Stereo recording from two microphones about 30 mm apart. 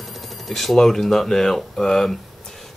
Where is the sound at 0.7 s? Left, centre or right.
Centre.